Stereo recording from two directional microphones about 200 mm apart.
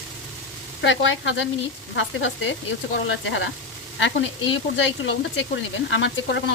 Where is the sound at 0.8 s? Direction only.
70° left (ahead or behind).